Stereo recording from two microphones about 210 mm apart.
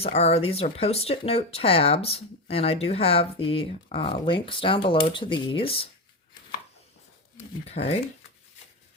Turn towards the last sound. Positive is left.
turn(degrees=30)  # may be behind; listen again after turning